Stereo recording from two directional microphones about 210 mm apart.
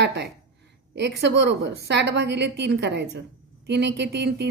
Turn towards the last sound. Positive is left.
turn(degrees=-55)  # may be behind; listen again after turning